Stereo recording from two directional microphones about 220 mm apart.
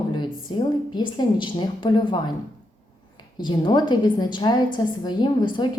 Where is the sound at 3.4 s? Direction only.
20° left (ahead or behind).